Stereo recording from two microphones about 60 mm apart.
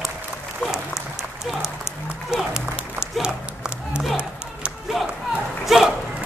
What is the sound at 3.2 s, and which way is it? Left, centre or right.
Crowd, centre.